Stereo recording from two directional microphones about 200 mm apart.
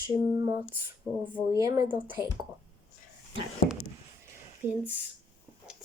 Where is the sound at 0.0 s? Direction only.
20° right (ahead or behind).